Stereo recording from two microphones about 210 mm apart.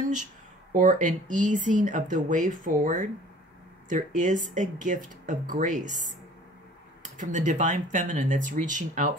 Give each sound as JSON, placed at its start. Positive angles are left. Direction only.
{"t": 0.7, "sound": "speech", "side_deg": -35}